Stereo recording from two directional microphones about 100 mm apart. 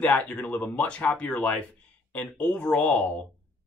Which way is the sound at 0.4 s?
15° left (ahead or behind).